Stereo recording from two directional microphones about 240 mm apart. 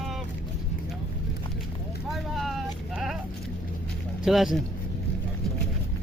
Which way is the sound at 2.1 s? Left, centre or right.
Centre.